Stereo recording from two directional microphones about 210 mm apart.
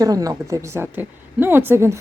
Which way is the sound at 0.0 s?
15° right (ahead or behind).